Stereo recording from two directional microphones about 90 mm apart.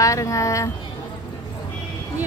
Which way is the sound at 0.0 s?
35° left (ahead or behind).